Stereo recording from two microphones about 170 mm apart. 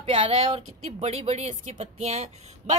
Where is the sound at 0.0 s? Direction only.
35° right (ahead or behind).